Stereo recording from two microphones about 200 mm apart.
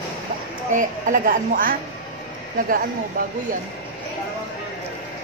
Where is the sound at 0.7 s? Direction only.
40° right (ahead or behind).